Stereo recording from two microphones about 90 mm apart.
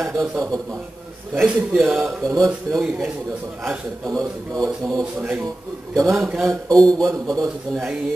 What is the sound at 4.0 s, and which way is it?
A man's voice, 40° right (ahead or behind).